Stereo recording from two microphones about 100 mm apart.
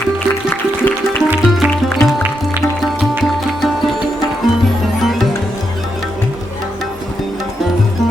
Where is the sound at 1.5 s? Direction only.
Centre (ahead or behind).